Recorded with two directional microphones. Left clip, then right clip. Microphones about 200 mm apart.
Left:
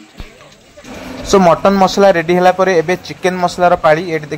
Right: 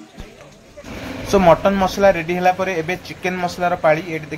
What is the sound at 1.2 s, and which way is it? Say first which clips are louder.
Speech: left 4 dB; 25° left (ahead or behind).